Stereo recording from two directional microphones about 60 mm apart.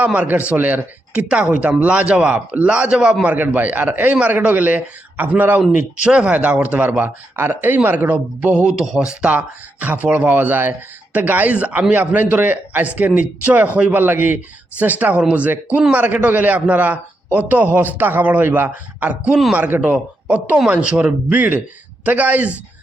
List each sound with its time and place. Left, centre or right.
0.0 s speech: right
1.3 s speech: centre
3.2 s speech: right
5.7 s a man's voice: centre
8.5 s a man's voice: centre